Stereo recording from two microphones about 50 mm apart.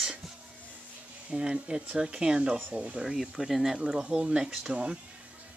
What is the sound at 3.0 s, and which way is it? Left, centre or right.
Speech, centre.